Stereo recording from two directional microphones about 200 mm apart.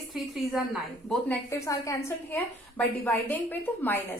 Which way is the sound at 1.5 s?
15° left (ahead or behind).